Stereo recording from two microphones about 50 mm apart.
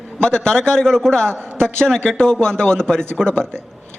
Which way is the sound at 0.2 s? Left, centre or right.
Centre.